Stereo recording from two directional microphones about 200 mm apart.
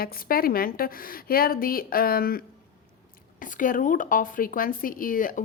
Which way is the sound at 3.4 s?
40° left (ahead or behind).